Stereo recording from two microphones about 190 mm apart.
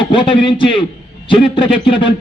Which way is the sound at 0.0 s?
25° left (ahead or behind).